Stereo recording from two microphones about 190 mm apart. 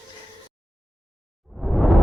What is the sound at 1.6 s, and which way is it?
Music, centre (ahead or behind).